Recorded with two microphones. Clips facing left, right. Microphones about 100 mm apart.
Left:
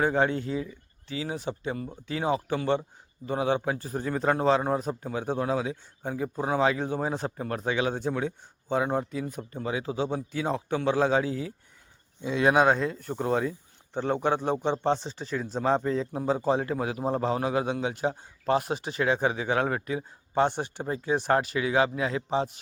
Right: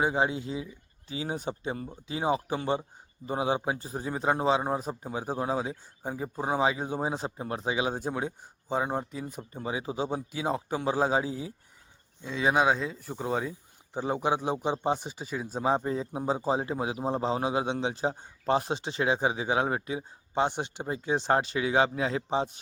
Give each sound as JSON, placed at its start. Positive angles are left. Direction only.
{"t": 0.0, "sound": "a man's voice", "side_deg": -15}
{"t": 1.1, "sound": "a man's voice", "side_deg": -30}
{"t": 5.4, "sound": "speech", "side_deg": -25}
{"t": 6.0, "sound": "a man's voice", "side_deg": -5}
{"t": 9.5, "sound": "a man's voice", "side_deg": -10}
{"t": 12.2, "sound": "speech", "side_deg": 0}